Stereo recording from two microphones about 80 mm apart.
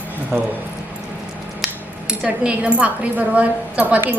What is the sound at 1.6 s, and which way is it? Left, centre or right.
A woman's voice, centre.